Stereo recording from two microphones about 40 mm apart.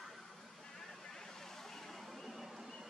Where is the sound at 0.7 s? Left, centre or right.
Centre.